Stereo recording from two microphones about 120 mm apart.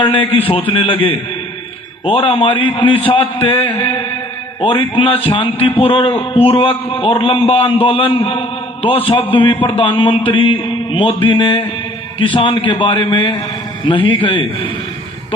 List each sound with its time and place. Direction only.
0.7 s a man's voice: 50° left (ahead or behind)